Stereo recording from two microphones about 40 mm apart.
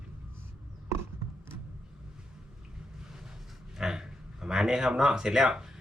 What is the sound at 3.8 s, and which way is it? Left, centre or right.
Speech, centre.